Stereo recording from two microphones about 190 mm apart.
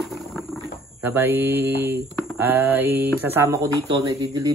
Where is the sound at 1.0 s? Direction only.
10° right (ahead or behind).